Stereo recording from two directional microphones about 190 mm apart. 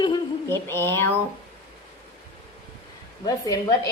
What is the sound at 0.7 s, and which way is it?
Speech, 10° left (ahead or behind).